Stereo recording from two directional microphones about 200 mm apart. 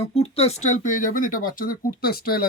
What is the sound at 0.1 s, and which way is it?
Speech, 30° left (ahead or behind).